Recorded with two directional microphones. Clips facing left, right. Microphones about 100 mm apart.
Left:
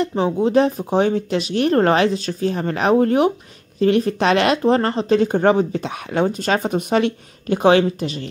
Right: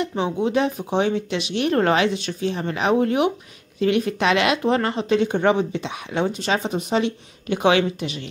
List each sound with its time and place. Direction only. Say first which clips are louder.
0.0 s speech: left 4 dB; 35° left (ahead or behind); by 7.2 s 55° left (ahead or behind)
7.4 s speech: left 4 dB; 40° left (ahead or behind)